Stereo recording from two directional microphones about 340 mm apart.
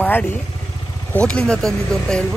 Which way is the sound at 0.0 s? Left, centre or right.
Centre.